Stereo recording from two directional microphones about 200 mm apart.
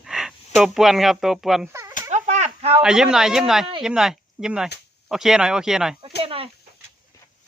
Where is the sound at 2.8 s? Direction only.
5° right (ahead or behind).